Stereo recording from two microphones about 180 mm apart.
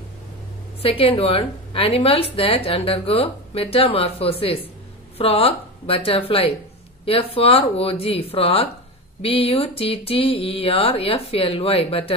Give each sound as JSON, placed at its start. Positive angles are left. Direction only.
{"t": 0.8, "sound": "a woman's voice", "side_deg": 30}